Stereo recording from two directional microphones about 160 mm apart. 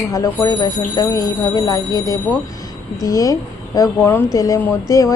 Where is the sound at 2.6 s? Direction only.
20° left (ahead or behind).